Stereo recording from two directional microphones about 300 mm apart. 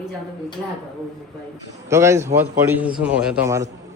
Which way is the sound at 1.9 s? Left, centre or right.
Centre.